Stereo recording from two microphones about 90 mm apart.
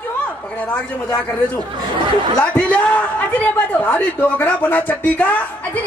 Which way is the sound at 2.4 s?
15° left (ahead or behind).